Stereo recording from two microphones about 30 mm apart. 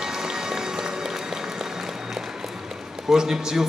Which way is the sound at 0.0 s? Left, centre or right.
Centre.